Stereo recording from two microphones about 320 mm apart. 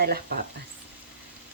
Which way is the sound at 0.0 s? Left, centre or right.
Right.